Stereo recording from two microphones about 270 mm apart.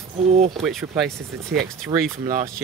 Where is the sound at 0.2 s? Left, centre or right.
Right.